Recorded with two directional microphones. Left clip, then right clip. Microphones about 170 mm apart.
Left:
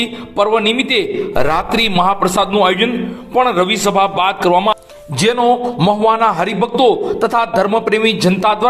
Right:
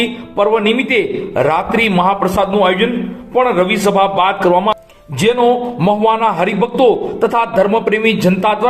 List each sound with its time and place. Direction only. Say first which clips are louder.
0.3 s a man's voice: even; 40° left (ahead or behind)